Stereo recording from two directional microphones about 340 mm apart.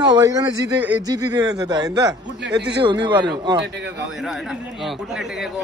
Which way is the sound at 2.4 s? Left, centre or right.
Right.